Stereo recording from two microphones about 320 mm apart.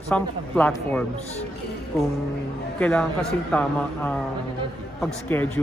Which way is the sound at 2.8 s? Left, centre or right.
Centre.